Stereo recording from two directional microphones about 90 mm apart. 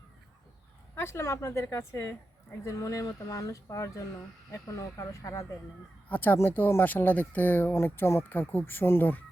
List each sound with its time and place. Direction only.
0.9 s speech: 30° left (ahead or behind)
6.1 s speech: 20° left (ahead or behind)